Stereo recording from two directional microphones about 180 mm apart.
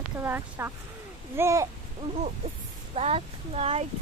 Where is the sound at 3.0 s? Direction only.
35° right (ahead or behind).